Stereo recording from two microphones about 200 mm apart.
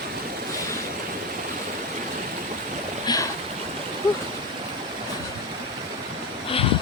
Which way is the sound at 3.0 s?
15° left (ahead or behind).